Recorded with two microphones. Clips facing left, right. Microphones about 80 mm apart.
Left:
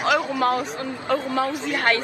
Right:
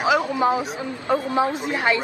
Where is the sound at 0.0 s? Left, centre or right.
Centre.